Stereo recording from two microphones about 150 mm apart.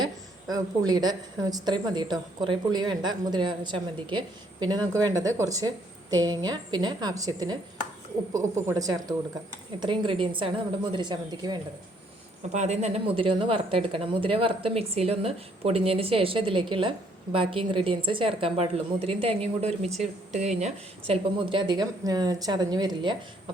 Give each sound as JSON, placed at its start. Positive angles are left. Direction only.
{"t": 0.0, "sound": "a woman's voice", "side_deg": -25}
{"t": 12.5, "sound": "a woman's voice", "side_deg": -50}